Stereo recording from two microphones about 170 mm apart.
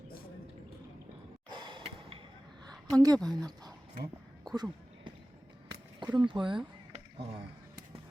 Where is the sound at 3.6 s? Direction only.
25° right (ahead or behind).